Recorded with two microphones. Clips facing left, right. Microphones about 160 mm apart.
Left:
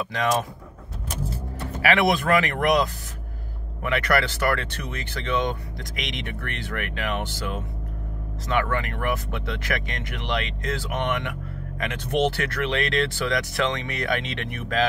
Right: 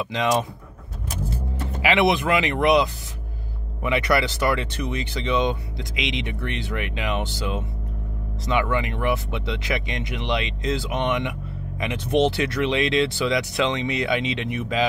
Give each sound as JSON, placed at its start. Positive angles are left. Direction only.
{"t": 0.1, "sound": "speech", "side_deg": -20}
{"t": 1.8, "sound": "speech", "side_deg": -15}
{"t": 3.8, "sound": "speech", "side_deg": -15}